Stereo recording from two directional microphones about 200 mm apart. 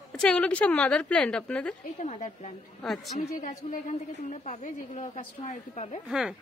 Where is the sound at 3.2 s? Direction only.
40° left (ahead or behind).